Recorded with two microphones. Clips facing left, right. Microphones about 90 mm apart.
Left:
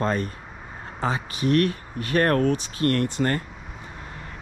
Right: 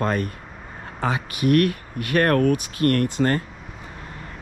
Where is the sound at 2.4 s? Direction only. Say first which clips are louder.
Right 3 dB; 30° left (ahead or behind).